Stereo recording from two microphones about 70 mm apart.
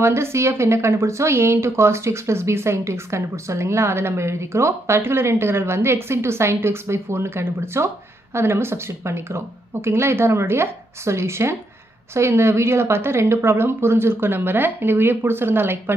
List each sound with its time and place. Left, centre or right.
0.0 s speech: right